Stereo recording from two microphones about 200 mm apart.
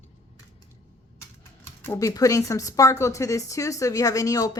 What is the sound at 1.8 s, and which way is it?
A woman's voice, 15° left (ahead or behind).